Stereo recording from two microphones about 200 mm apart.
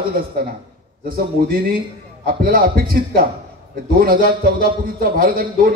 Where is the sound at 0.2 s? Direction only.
45° right (ahead or behind).